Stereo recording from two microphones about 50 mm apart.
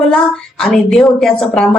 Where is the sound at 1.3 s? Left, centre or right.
Centre.